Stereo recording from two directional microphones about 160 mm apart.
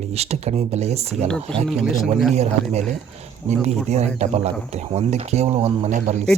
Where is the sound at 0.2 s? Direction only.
40° right (ahead or behind).